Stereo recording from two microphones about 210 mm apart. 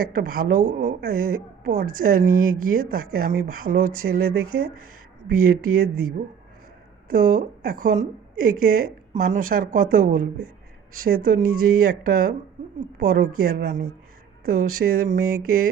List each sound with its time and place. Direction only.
0.0 s a woman's voice: 45° right (ahead or behind)
2.3 s speech: 85° right
3.2 s a woman's voice: 45° right (ahead or behind)